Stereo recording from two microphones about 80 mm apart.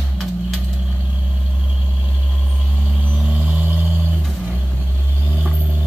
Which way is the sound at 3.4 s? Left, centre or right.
Right.